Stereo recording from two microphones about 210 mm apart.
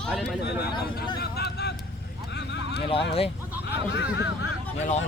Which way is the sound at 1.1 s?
50° left (ahead or behind).